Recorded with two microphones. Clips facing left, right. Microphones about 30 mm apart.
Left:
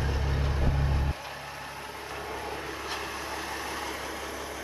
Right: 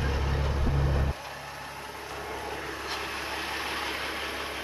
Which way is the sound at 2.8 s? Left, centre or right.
Centre.